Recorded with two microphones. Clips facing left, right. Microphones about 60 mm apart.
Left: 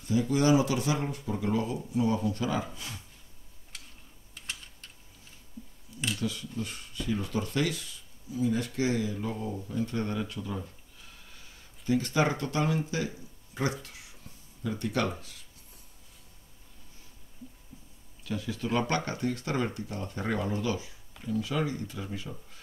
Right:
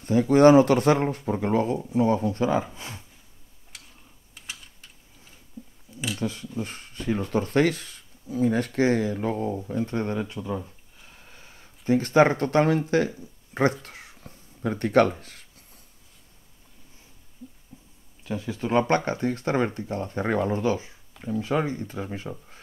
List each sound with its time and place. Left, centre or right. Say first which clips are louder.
0.0 s speech: right 10 dB; right
6.1 s speech: right 6 dB; right
9.6 s speech: right 4 dB; right
13.8 s a sound: right 5 dB; right
18.2 s speech: right 4 dB; right